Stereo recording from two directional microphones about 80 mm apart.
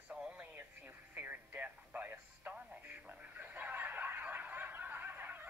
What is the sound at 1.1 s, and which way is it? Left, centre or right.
Music, centre.